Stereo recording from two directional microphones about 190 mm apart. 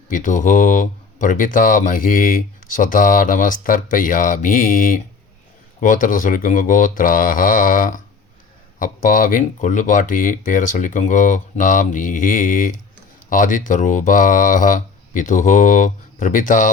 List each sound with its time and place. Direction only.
0.1 s speech: 45° left (ahead or behind)